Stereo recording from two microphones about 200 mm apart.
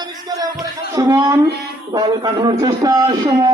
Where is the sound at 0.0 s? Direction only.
20° right (ahead or behind).